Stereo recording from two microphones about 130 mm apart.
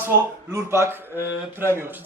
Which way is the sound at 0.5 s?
20° right (ahead or behind).